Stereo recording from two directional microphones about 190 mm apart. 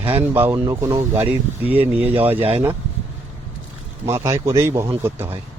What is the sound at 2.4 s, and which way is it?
Speech, 30° right (ahead or behind).